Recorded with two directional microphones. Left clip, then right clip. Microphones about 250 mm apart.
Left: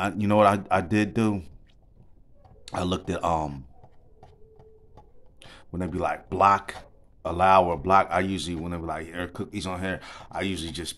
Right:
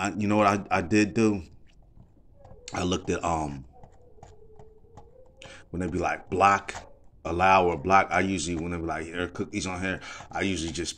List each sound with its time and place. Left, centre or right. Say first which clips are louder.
0.0 s a man's voice: left 3 dB; left
2.6 s a man's voice: even; left
5.4 s a man's voice: even; left